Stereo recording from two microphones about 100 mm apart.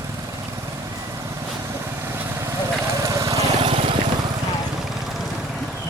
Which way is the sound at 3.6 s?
65° right (ahead or behind).